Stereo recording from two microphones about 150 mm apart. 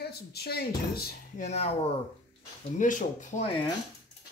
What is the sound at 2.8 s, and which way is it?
Speech, 60° left (ahead or behind).